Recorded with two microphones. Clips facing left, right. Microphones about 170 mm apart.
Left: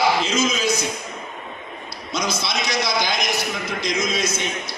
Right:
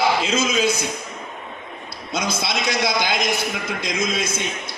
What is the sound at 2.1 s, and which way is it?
A man's voice, 55° right (ahead or behind).